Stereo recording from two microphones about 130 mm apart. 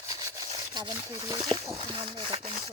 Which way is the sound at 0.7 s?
30° right (ahead or behind).